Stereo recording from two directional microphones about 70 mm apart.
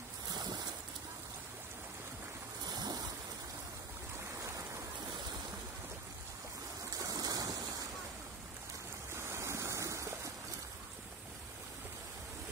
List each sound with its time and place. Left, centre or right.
0.3 s a sound: right
2.6 s waves: right
6.9 s boat: right
9.1 s waves: right